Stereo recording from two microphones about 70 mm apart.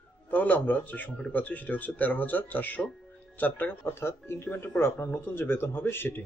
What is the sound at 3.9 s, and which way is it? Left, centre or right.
Speech, left.